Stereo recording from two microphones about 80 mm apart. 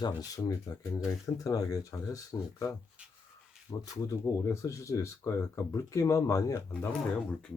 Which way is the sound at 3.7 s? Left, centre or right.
Left.